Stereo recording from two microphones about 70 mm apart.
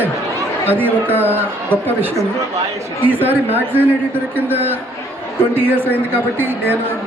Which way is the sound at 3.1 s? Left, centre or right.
Right.